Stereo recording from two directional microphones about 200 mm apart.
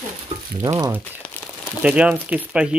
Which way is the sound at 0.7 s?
15° right (ahead or behind).